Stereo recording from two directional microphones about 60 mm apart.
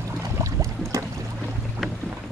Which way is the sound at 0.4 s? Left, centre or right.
Right.